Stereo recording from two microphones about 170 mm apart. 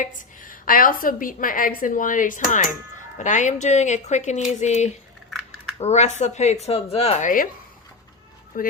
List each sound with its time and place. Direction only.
0.0 s a woman's voice: 50° left (ahead or behind)
8.5 s a woman's voice: 55° left (ahead or behind)